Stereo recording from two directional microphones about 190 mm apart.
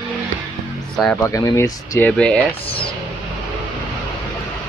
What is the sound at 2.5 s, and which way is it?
Speech, 30° left (ahead or behind).